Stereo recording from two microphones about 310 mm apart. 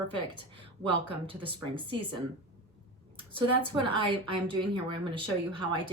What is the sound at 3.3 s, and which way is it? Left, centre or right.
Speech, centre.